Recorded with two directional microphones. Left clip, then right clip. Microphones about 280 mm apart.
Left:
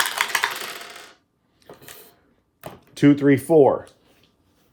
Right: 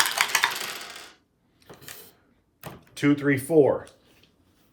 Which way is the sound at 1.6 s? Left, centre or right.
Left.